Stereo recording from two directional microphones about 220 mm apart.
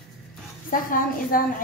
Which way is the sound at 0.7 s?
40° left (ahead or behind).